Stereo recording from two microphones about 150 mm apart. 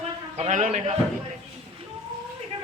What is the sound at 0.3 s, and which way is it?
Speech, 50° right (ahead or behind).